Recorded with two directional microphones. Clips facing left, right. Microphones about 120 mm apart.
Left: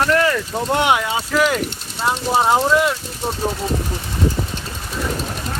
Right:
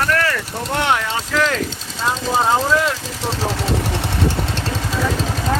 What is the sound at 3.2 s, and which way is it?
Vehicle, 90° right.